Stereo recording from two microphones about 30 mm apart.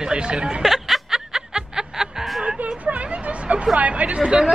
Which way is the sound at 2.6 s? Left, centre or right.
Right.